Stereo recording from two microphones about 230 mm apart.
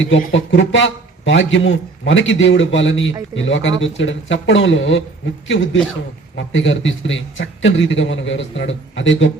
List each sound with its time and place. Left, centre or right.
0.0 s a man's voice: left